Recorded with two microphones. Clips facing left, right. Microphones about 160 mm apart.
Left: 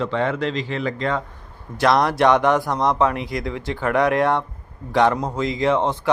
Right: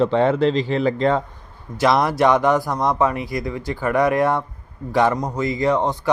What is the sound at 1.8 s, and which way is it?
A man's voice, centre (ahead or behind).